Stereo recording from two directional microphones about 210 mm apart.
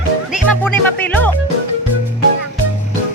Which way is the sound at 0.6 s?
5° left (ahead or behind).